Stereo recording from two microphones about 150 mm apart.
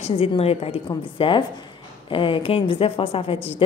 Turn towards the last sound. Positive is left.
turn(degrees=40)  # may be behind; listen again after turning